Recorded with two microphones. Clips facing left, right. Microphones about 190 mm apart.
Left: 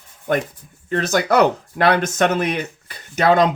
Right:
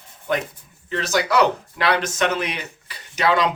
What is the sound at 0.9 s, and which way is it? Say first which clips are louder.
Speech: left 3 dB; 50° left (ahead or behind).